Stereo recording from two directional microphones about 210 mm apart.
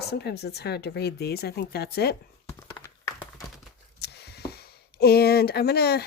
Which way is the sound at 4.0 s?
50° left (ahead or behind).